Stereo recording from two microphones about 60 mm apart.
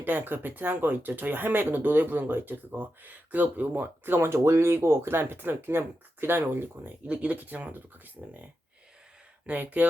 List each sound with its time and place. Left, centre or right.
0.0 s speech: right
7.1 s speech: right
9.5 s speech: right